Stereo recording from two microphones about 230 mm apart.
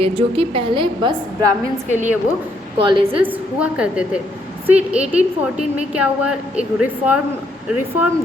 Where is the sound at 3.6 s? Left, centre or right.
Centre.